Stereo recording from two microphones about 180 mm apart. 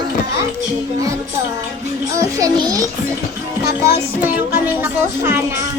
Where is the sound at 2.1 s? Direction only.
20° right (ahead or behind).